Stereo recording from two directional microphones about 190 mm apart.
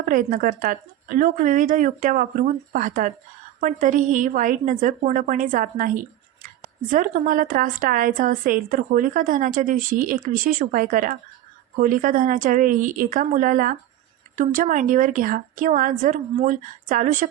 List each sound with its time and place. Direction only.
0.1 s a woman's voice: 45° right (ahead or behind)